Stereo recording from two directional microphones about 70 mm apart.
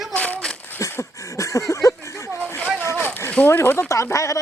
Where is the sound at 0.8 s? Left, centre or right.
Left.